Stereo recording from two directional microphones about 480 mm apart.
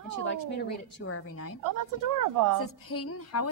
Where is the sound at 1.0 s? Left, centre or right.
Left.